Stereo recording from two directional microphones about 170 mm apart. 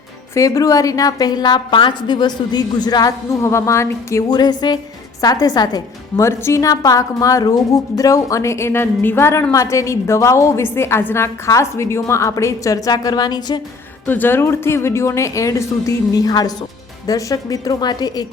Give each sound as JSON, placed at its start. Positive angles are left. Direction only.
{"t": 0.3, "sound": "a woman's voice", "side_deg": 20}
{"t": 14.1, "sound": "a woman's voice", "side_deg": 10}